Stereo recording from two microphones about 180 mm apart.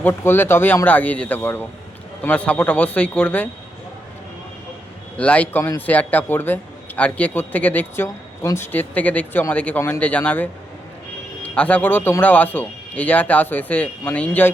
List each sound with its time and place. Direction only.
0.0 s a man's voice: 10° left (ahead or behind)
5.1 s a man's voice: 5° left (ahead or behind)